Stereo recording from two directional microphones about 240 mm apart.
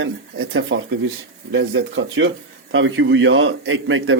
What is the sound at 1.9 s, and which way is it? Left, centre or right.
Speech, right.